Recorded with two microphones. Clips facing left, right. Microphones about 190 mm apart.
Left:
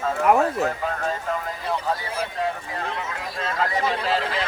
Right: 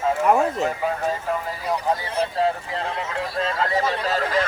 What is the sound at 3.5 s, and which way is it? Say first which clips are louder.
Speech: right 1 dB; 30° right (ahead or behind).